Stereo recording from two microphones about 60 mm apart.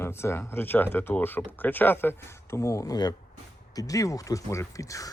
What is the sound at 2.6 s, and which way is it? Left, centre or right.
Speech, left.